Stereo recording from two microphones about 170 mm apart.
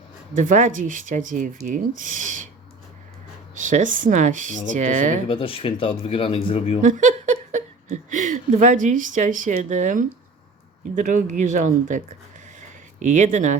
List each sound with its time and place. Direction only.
0.3 s speech: 50° right (ahead or behind)
3.5 s speech: 50° right (ahead or behind)
5.3 s speech: 30° left (ahead or behind)
6.8 s speech: 50° right (ahead or behind)
12.5 s a sound: 45° right (ahead or behind)